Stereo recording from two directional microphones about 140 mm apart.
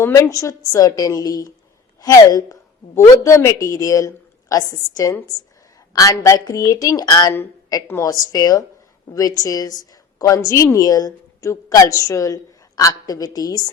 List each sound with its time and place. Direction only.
0.0 s a woman's voice: 25° left (ahead or behind)